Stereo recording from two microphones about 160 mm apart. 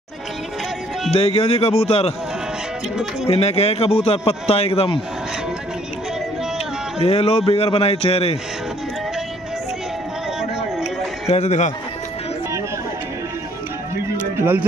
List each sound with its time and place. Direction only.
1.1 s a man's voice: 40° left (ahead or behind)
3.3 s a man's voice: 40° left (ahead or behind)
7.0 s a man's voice: 40° left (ahead or behind)
11.2 s speech: 45° left (ahead or behind)
14.4 s speech: 15° right (ahead or behind)